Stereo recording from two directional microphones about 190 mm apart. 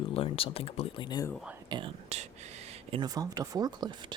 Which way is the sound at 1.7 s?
30° right (ahead or behind).